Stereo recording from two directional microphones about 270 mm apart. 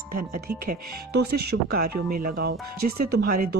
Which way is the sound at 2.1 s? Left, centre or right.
Right.